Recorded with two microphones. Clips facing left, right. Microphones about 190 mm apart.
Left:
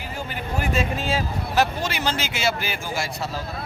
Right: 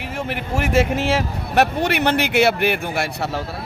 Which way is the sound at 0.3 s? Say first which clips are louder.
Right 4 dB; 80° right.